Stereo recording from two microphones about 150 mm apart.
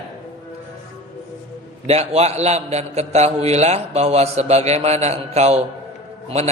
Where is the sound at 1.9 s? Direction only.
45° right (ahead or behind).